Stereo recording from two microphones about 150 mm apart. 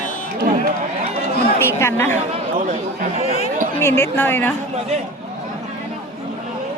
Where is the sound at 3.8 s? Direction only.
15° left (ahead or behind).